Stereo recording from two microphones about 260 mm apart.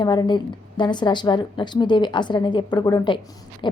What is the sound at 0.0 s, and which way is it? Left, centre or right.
A woman's voice, centre.